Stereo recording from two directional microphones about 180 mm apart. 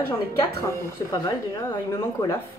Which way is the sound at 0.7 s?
20° left (ahead or behind).